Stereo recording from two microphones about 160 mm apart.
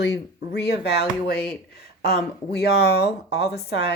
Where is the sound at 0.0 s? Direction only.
90° left.